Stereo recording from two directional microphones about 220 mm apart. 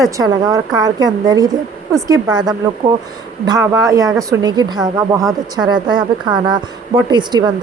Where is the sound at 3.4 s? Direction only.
15° right (ahead or behind).